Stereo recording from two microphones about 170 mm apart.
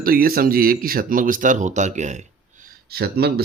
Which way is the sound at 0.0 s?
60° right (ahead or behind).